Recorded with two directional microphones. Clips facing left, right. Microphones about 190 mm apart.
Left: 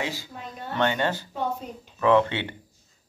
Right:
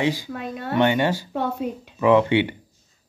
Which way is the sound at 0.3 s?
70° right (ahead or behind).